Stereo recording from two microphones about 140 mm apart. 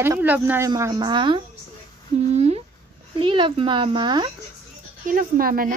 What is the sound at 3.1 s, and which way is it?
Speech, 35° right (ahead or behind).